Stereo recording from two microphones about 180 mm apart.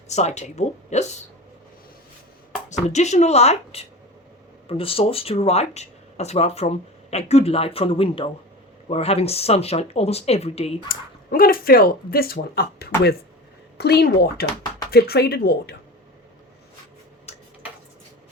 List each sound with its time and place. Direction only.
0.1 s speech: 40° left (ahead or behind)
2.6 s speech: 40° left (ahead or behind)
10.8 s speech: 55° left (ahead or behind)
17.3 s a sound: 35° left (ahead or behind)